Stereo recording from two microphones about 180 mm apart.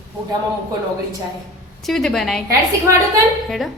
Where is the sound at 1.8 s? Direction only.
Centre (ahead or behind).